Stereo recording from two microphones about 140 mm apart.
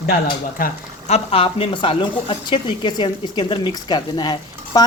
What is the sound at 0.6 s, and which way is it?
Speech, 90° left.